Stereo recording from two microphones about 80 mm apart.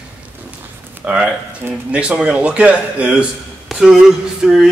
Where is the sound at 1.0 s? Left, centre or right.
Centre.